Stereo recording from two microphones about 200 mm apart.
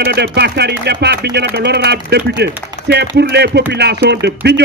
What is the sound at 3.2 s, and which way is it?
A man's voice, 55° right (ahead or behind).